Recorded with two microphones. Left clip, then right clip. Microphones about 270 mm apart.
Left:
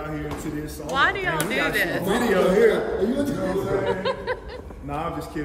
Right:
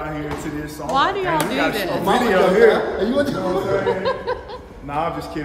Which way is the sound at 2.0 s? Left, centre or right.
Centre.